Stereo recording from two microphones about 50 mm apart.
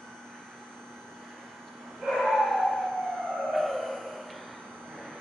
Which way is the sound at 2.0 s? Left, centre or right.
Centre.